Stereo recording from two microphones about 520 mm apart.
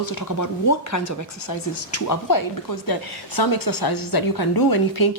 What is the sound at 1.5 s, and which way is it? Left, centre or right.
A woman's voice, left.